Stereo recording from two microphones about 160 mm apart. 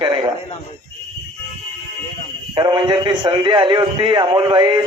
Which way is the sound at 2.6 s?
30° right (ahead or behind).